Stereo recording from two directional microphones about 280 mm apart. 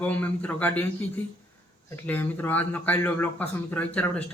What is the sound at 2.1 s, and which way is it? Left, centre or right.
A man's voice, centre.